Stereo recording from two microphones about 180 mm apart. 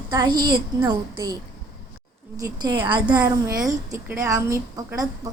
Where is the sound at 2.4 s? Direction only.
25° right (ahead or behind).